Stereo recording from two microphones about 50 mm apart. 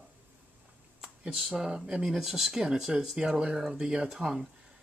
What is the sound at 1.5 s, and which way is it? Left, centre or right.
Speech, centre.